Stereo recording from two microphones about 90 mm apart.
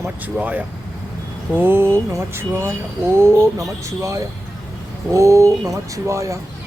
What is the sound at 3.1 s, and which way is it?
Speech, 30° right (ahead or behind).